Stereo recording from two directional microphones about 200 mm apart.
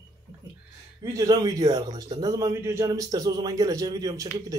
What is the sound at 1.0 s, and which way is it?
A man's voice, 15° right (ahead or behind).